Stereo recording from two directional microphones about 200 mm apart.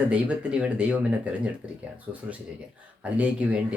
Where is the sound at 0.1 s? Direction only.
5° right (ahead or behind).